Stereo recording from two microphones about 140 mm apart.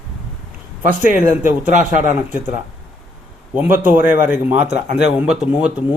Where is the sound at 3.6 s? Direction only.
15° right (ahead or behind).